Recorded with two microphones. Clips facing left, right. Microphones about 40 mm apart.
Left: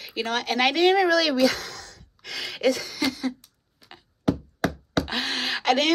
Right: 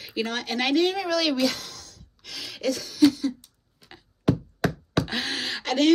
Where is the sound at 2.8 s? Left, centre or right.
Left.